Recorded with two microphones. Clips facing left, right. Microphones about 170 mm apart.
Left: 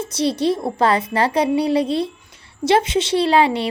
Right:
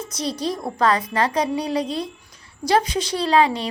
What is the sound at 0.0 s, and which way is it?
A woman's voice, 30° left (ahead or behind).